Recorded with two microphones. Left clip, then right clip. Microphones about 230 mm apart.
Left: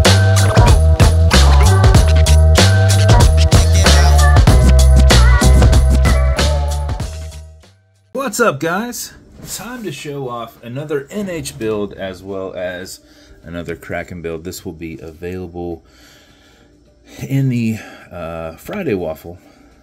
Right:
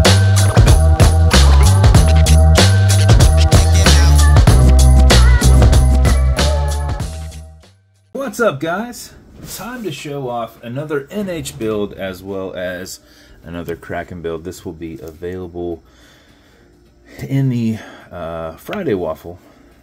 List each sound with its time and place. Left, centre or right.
0.0 s music: centre
8.1 s speech: left
9.6 s speech: centre
12.3 s speech: centre
13.5 s speech: centre
17.3 s speech: centre